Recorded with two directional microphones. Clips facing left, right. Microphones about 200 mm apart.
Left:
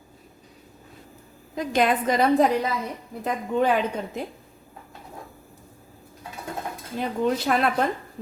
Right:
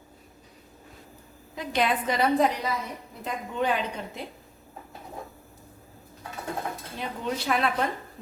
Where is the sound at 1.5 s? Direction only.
45° left (ahead or behind).